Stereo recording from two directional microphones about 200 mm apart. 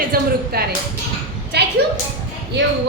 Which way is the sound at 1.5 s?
55° right (ahead or behind).